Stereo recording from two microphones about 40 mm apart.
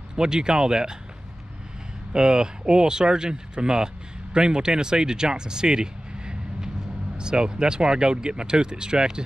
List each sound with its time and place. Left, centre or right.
0.1 s speech: centre
2.1 s speech: right